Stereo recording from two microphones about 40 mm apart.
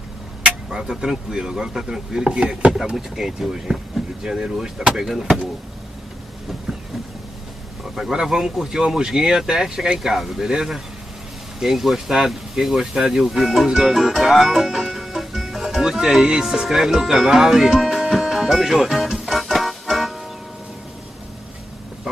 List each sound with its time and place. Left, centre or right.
0.7 s speech: centre
7.9 s speech: centre
11.6 s speech: centre
12.9 s speech: centre
17.0 s music: centre